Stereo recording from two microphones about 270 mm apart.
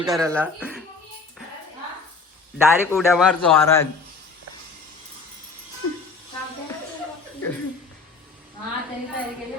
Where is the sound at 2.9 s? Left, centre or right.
Centre.